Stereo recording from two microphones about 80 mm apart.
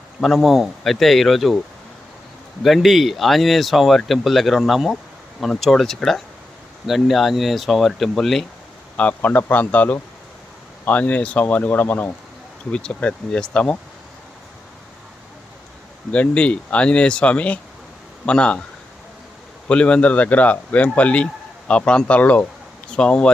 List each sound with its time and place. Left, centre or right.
0.2 s speech: centre
2.6 s speech: centre
9.0 s speech: centre
12.7 s speech: centre
16.1 s speech: centre
19.6 s speech: centre